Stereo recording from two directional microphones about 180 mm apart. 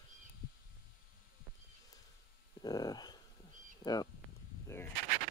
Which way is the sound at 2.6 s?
20° left (ahead or behind).